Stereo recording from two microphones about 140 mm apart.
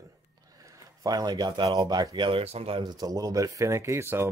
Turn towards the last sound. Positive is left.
turn(degrees=-15)  # may be behind; listen again after turning